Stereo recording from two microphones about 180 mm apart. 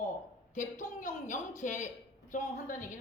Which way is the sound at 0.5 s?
45° left (ahead or behind).